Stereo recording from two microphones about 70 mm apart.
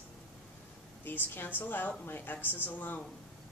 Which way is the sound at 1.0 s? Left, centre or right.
Left.